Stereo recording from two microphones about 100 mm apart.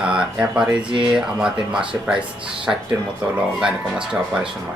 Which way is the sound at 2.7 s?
20° right (ahead or behind).